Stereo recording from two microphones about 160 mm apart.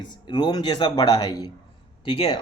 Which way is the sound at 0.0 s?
25° left (ahead or behind).